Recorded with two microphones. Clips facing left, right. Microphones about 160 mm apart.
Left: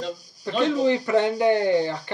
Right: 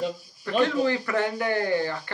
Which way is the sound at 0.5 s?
20° left (ahead or behind).